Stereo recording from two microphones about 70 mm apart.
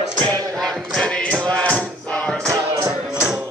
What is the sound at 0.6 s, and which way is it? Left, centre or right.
Music, centre.